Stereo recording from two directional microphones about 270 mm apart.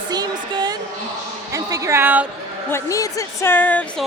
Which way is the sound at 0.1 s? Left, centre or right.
Centre.